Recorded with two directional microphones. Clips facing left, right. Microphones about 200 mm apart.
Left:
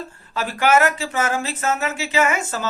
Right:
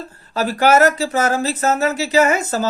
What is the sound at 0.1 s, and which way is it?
Speech, 40° right (ahead or behind).